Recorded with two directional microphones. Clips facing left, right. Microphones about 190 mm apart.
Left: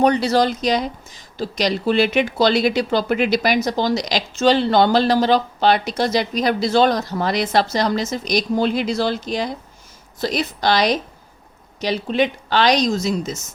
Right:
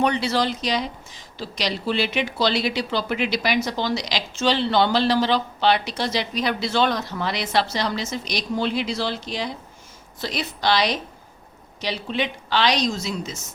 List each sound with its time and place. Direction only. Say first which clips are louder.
0.0 s speech: left 5 dB; 40° left (ahead or behind)